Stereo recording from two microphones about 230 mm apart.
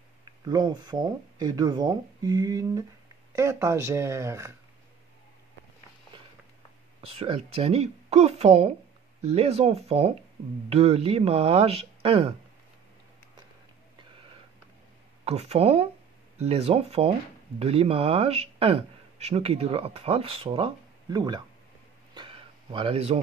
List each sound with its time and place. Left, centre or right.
0.2 s speech: centre
7.1 s speech: right
15.2 s speech: right
22.1 s a sound: right